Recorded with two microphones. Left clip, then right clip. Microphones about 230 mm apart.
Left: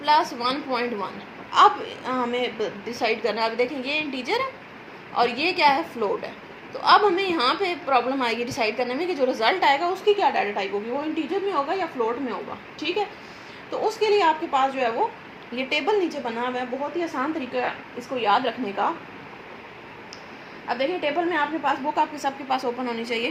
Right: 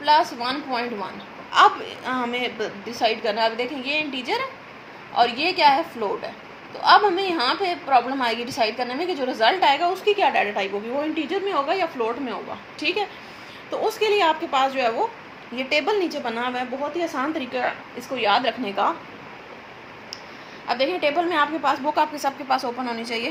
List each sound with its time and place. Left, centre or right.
0.0 s a woman's voice: right
20.7 s a woman's voice: right